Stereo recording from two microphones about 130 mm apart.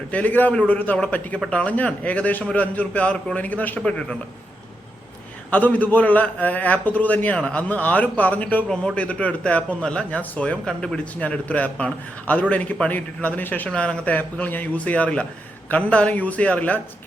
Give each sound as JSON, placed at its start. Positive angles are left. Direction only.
{"t": 0.1, "sound": "a man's voice", "side_deg": 10}
{"t": 5.5, "sound": "a man's voice", "side_deg": 10}